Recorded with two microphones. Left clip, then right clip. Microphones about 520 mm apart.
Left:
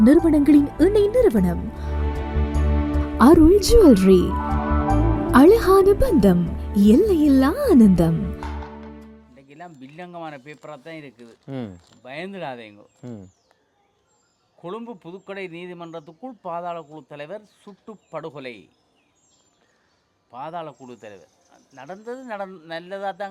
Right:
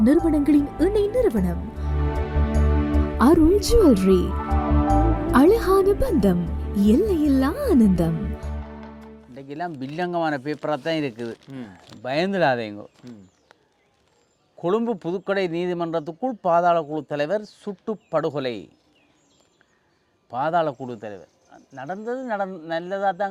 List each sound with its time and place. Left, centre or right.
0.0 s a woman's voice: centre
9.3 s speech: right
11.4 s speech: left
12.0 s speech: right
13.0 s speech: left
14.6 s speech: right
20.3 s speech: right